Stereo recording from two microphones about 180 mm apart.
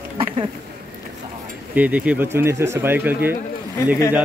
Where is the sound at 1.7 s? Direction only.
10° right (ahead or behind).